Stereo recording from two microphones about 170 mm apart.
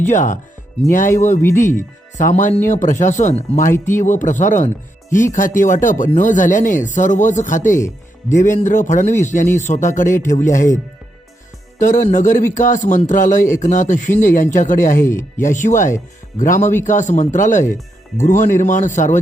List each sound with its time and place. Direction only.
0.0 s speech: 45° left (ahead or behind)
1.4 s speech: 15° left (ahead or behind)
1.6 s speech: 50° left (ahead or behind)
7.8 s speech: 15° left (ahead or behind)
8.4 s speech: 45° left (ahead or behind)
11.8 s speech: 50° left (ahead or behind)